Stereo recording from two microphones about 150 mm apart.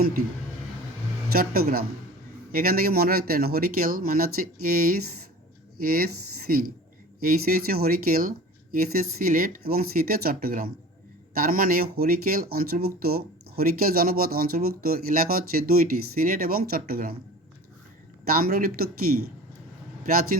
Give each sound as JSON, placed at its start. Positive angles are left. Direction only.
{"t": 0.0, "sound": "speech", "side_deg": -90}
{"t": 1.3, "sound": "speech", "side_deg": -85}
{"t": 18.3, "sound": "speech", "side_deg": -80}